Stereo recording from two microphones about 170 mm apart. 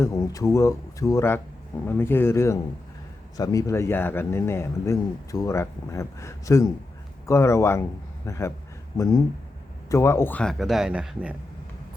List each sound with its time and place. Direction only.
0.0 s speech: 15° left (ahead or behind); by 11.3 s 5° right (ahead or behind)